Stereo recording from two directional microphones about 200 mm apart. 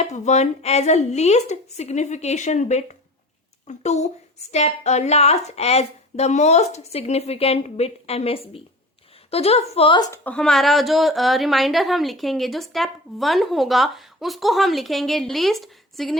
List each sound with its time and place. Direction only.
0.0 s a woman's voice: 35° left (ahead or behind)
10.2 s a woman's voice: 5° left (ahead or behind)